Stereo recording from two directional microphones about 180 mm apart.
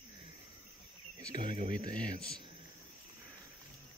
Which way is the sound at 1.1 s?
20° right (ahead or behind).